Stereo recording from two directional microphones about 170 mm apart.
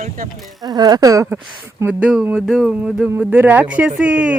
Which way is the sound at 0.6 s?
25° right (ahead or behind).